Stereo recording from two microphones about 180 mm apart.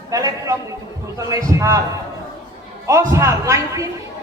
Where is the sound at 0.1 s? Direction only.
20° right (ahead or behind).